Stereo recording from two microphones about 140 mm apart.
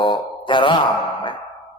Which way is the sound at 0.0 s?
35° left (ahead or behind).